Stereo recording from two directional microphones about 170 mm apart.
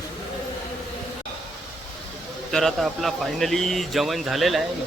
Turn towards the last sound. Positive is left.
turn(degrees=0)  # may be behind; listen again after turning